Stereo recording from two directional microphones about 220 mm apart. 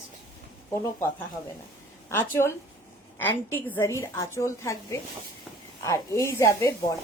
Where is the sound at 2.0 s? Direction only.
10° left (ahead or behind).